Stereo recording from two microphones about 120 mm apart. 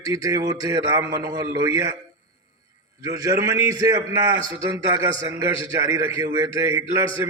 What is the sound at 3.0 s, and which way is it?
A man's voice, 30° right (ahead or behind).